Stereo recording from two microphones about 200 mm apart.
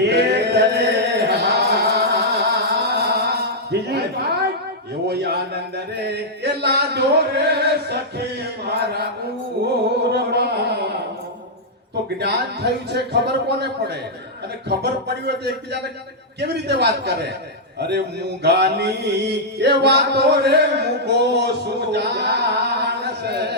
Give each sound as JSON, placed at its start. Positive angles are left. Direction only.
{"t": 0.0, "sound": "chant", "side_deg": -55}
{"t": 5.0, "sound": "a sound", "side_deg": -55}
{"t": 10.1, "sound": "a sound", "side_deg": -55}
{"t": 12.2, "sound": "mantra", "side_deg": -55}
{"t": 17.7, "sound": "a man's voice", "side_deg": -55}
{"t": 18.4, "sound": "mantra", "side_deg": -55}